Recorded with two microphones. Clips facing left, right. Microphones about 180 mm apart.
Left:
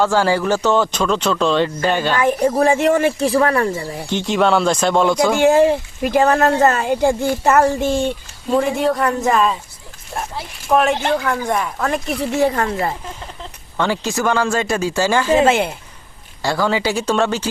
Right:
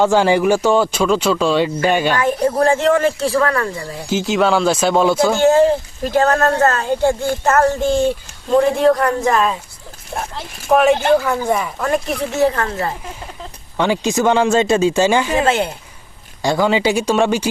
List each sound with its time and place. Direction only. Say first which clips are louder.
0.0 s speech: right 3 dB; 20° right (ahead or behind)
2.1 s speech: even; 15° left (ahead or behind)
4.1 s speech: right 1 dB; centre (ahead or behind)
5.3 s speech: left 1 dB; 10° left (ahead or behind)
12.4 s speech: right 1 dB; 10° left (ahead or behind)
13.7 s speech: right 3 dB; 15° right (ahead or behind)
15.4 s speech: left 1 dB; 10° left (ahead or behind)
16.4 s speech: right 3 dB; 15° right (ahead or behind)